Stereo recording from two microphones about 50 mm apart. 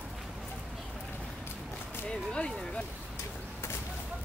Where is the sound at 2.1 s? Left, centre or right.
Centre.